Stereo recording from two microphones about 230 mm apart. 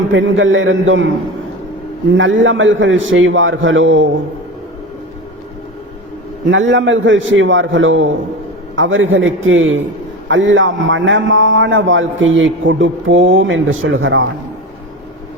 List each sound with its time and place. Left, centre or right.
0.1 s a man's voice: right
2.1 s a man's voice: right
6.5 s a man's voice: right